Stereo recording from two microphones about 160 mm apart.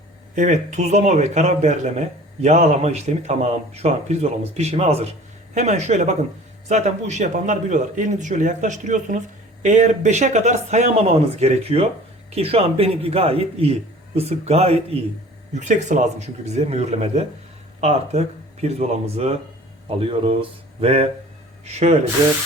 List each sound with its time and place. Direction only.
0.3 s a man's voice: 50° right (ahead or behind)